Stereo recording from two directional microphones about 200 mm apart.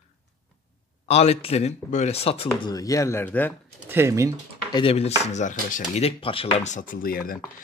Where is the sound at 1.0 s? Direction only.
30° left (ahead or behind); by 3.5 s 10° left (ahead or behind).